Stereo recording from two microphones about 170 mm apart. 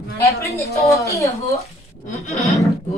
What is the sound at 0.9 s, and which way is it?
Speech, 20° left (ahead or behind).